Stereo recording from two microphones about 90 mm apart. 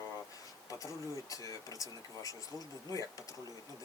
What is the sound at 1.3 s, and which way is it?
Speech, 40° left (ahead or behind).